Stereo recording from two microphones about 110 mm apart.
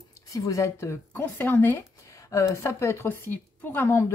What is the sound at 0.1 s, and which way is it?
A woman's voice, 30° left (ahead or behind).